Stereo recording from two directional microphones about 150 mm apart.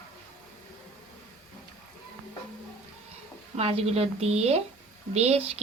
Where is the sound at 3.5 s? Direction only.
40° right (ahead or behind).